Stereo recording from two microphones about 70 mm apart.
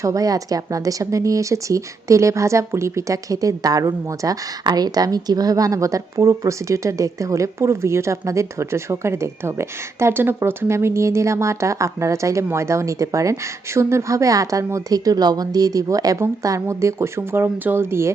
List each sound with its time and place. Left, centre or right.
0.0 s a woman's voice: right
4.6 s a woman's voice: right
16.4 s speech: right